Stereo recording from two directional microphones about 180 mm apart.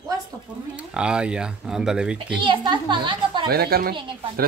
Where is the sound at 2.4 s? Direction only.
25° right (ahead or behind).